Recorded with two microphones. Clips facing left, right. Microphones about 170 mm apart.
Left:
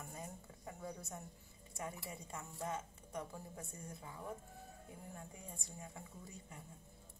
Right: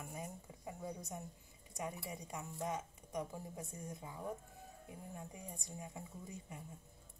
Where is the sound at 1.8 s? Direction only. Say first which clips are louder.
Right 2 dB; 15° right (ahead or behind).